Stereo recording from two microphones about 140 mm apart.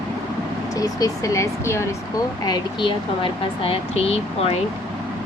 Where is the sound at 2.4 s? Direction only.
30° left (ahead or behind).